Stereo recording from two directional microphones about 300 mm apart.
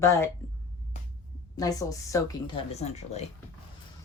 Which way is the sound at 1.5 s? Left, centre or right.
Centre.